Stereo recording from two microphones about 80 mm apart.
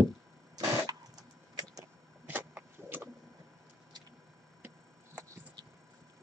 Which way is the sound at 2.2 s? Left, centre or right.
Right.